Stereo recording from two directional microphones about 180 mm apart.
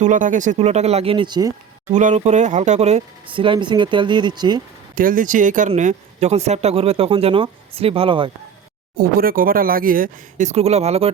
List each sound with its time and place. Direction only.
0.0 s speech: 45° right (ahead or behind); by 1.5 s 20° right (ahead or behind)
1.9 s speech: 40° right (ahead or behind); by 4.6 s 25° right (ahead or behind)
4.9 s speech: 50° right (ahead or behind); by 8.3 s 30° right (ahead or behind)
9.0 s speech: 55° right (ahead or behind); by 11.1 s 35° right (ahead or behind)